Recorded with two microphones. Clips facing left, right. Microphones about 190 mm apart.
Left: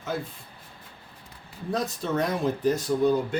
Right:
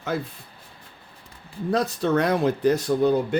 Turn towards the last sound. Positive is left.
turn(degrees=-65)  # may be behind; listen again after turning